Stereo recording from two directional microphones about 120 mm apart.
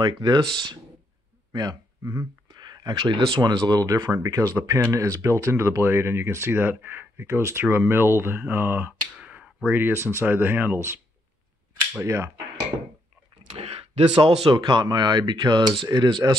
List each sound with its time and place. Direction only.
0.0 s speech: 40° right (ahead or behind); by 8.9 s 20° right (ahead or behind)
9.1 s speech: 10° right (ahead or behind)
12.0 s speech: 25° right (ahead or behind)
13.6 s speech: 55° right (ahead or behind)
14.5 s speech: 40° right (ahead or behind)